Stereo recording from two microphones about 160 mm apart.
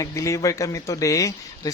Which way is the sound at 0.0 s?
20° left (ahead or behind).